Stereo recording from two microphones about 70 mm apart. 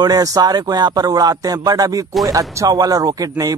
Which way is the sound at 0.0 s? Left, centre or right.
Right.